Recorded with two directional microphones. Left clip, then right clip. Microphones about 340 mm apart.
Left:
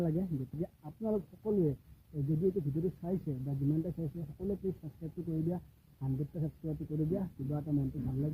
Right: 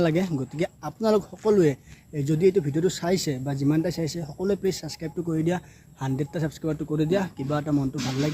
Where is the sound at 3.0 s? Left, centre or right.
Centre.